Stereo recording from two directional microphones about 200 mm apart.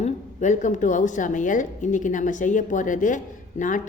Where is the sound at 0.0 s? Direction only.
35° left (ahead or behind).